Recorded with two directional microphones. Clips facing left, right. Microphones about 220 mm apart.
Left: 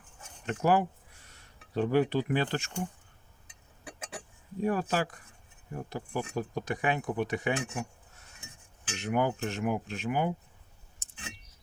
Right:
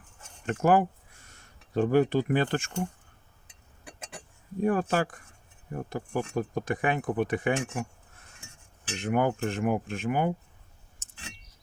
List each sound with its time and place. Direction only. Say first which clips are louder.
0.4 s speech: right 3 dB; 50° right (ahead or behind)
4.6 s speech: right 3 dB; 50° right (ahead or behind)